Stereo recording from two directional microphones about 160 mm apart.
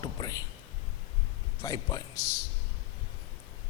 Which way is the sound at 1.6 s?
20° left (ahead or behind).